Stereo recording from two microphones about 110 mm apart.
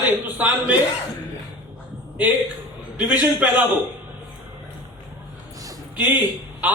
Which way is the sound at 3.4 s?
15° right (ahead or behind).